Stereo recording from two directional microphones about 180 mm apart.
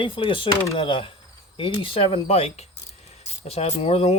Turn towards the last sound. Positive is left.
turn(degrees=35)  # may be behind; listen again after turning